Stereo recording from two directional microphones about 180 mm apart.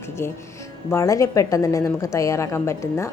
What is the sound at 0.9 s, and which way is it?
A woman's voice, 15° left (ahead or behind).